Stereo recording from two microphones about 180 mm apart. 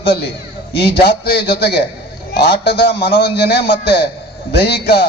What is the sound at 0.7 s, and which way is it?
A man's voice, 60° left (ahead or behind).